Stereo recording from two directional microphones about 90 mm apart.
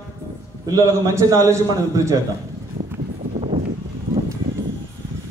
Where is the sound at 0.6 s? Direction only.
40° right (ahead or behind).